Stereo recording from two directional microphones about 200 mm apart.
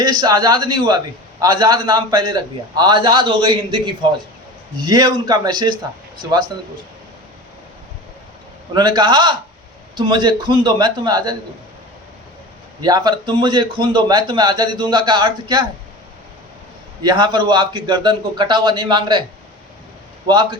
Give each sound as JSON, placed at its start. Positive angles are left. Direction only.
{"t": 0.0, "sound": "a man's voice", "side_deg": -20}
{"t": 8.7, "sound": "a man's voice", "side_deg": -20}
{"t": 12.8, "sound": "a man's voice", "side_deg": -20}
{"t": 17.0, "sound": "a man's voice", "side_deg": -20}
{"t": 20.2, "sound": "a man's voice", "side_deg": -20}